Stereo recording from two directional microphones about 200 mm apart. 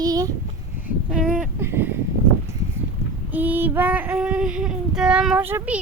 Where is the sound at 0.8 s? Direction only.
5° right (ahead or behind).